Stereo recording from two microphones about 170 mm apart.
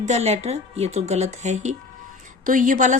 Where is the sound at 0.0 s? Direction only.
40° right (ahead or behind).